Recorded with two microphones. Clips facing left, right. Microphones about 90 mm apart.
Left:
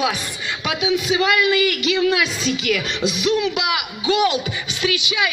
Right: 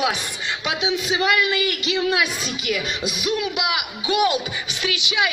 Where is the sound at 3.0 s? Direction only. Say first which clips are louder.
Left 5 dB; 30° left (ahead or behind).